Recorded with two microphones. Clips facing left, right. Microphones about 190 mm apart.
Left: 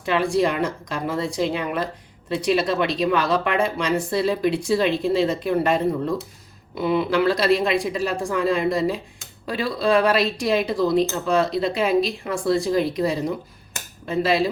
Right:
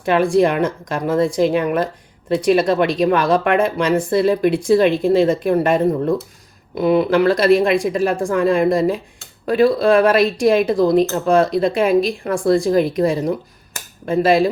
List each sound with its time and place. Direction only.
0.0 s speech: 50° right (ahead or behind)